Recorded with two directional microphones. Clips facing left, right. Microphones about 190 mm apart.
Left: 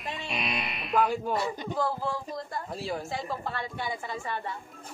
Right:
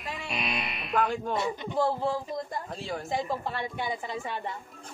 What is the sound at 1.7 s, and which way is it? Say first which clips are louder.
Speech: right 5 dB; 25° right (ahead or behind).